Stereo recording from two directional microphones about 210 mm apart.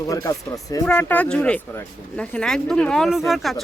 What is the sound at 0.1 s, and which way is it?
Speech, 15° left (ahead or behind).